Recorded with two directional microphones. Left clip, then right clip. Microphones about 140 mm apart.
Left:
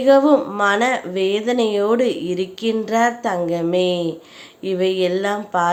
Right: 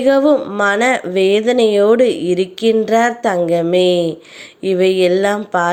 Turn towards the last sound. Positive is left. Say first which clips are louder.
# right 4 dB
turn(degrees=-30)  # may be behind; listen again after turning